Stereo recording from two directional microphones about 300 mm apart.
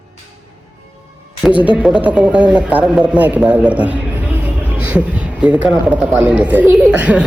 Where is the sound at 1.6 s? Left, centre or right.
Centre.